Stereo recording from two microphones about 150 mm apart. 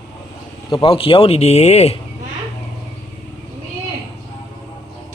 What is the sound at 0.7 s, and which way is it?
Speech, 35° left (ahead or behind).